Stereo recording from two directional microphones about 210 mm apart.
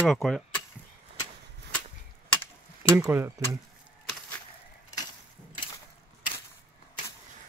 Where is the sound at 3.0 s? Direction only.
10° right (ahead or behind).